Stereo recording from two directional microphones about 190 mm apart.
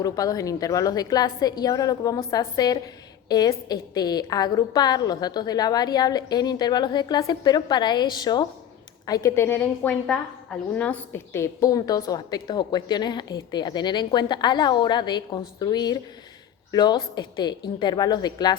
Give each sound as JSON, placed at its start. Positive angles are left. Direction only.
{"t": 0.0, "sound": "a woman's voice", "side_deg": 20}